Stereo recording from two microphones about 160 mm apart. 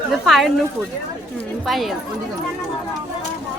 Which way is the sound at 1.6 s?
Centre (ahead or behind).